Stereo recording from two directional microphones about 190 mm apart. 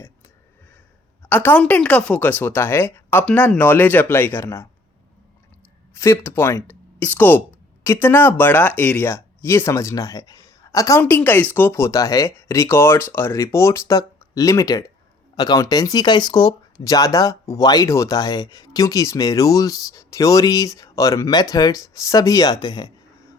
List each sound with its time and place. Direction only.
1.3 s speech: 10° left (ahead or behind)
5.9 s speech: 15° left (ahead or behind)